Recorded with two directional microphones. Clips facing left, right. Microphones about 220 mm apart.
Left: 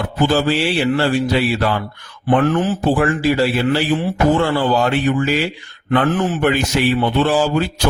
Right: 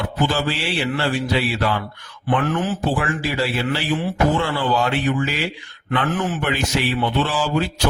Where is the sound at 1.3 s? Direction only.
40° left (ahead or behind).